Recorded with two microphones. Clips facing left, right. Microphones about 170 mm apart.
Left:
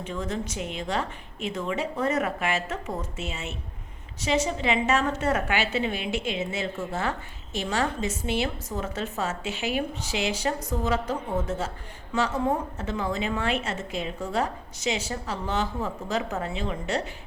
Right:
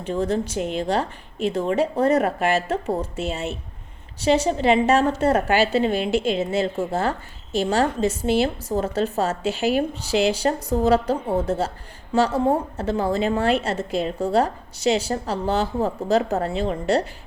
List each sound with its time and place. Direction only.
0.0 s a woman's voice: 35° right (ahead or behind)